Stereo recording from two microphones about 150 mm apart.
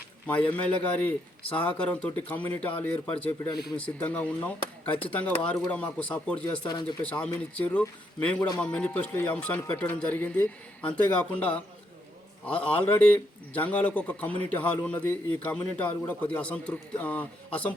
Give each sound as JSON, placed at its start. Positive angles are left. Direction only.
{"t": 0.3, "sound": "a man's voice", "side_deg": 10}
{"t": 5.7, "sound": "a man's voice", "side_deg": 10}
{"t": 6.6, "sound": "a man's voice", "side_deg": 30}
{"t": 7.0, "sound": "a man's voice", "side_deg": 10}
{"t": 8.4, "sound": "a man's voice", "side_deg": 25}
{"t": 8.6, "sound": "a man's voice", "side_deg": 10}